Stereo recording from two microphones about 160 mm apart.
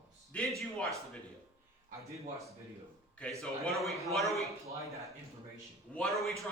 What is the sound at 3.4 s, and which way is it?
A man's voice, centre (ahead or behind).